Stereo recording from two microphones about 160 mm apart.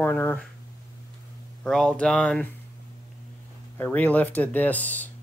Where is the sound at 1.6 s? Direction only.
5° left (ahead or behind).